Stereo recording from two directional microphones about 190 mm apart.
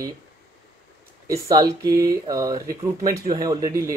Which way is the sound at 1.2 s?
15° right (ahead or behind).